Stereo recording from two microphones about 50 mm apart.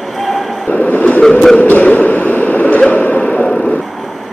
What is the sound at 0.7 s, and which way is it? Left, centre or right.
Train, left.